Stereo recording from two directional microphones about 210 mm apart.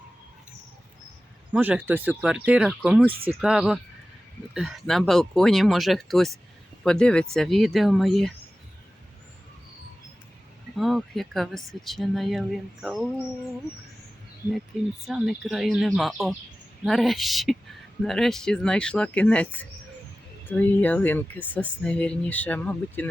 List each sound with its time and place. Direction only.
1.5 s speech: 5° right (ahead or behind)
10.8 s speech: centre (ahead or behind)
15.0 s speech: centre (ahead or behind)